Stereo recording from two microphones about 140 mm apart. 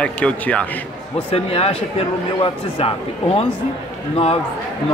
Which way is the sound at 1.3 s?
45° left (ahead or behind).